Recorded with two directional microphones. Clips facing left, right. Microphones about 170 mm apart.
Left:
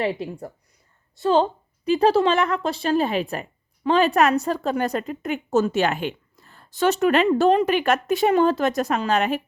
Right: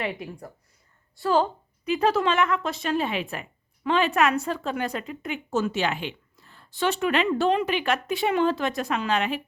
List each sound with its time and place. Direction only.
0.0 s a woman's voice: 30° left (ahead or behind)